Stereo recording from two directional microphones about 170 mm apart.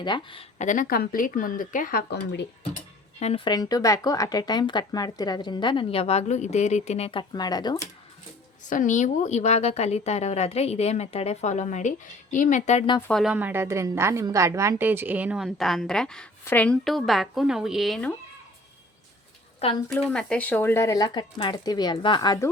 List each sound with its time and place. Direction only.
0.0 s speech: 30° left (ahead or behind)
0.6 s speech: 50° left (ahead or behind); by 2.5 s 85° left
3.2 s speech: 40° left (ahead or behind)
3.4 s speech: 20° left (ahead or behind)
8.7 s speech: 50° left (ahead or behind)
13.0 s a woman's voice: 5° left (ahead or behind)
13.3 s a woman's voice: 10° right (ahead or behind)
19.9 s speech: 5° left (ahead or behind); by 22.4 s 25° left (ahead or behind)